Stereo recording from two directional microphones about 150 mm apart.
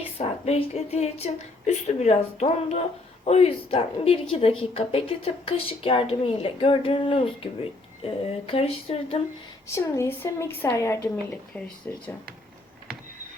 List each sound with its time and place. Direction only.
0.2 s a woman's voice: 45° left (ahead or behind)
9.6 s a woman's voice: 20° left (ahead or behind)